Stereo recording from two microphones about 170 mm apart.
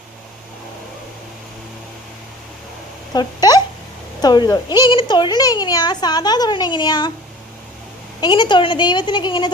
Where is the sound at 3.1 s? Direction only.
25° left (ahead or behind).